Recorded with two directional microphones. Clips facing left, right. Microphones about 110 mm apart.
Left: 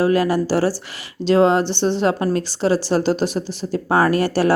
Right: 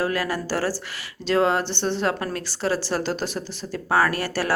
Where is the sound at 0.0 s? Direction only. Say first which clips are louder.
Left 8 dB; 20° left (ahead or behind).